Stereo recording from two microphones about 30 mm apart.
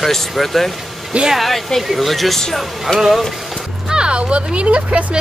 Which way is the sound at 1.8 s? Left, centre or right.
Centre.